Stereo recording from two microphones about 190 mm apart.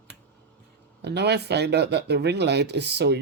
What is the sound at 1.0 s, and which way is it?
Speech, 60° right (ahead or behind).